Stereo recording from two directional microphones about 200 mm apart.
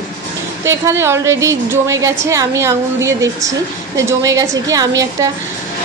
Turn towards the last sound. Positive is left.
turn(degrees=-15)  # may be behind; listen again after turning